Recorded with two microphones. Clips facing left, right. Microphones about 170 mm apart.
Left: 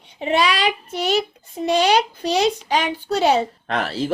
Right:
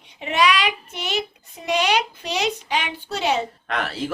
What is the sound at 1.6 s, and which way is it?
A child's voice, 35° left (ahead or behind).